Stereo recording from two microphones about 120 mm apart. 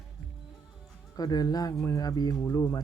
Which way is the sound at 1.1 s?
35° left (ahead or behind).